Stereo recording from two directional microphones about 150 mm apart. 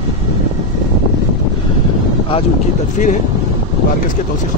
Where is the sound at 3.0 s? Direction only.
60° left (ahead or behind).